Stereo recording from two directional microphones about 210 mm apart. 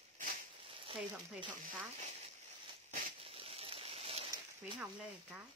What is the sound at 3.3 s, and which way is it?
Rain on surface, 25° right (ahead or behind).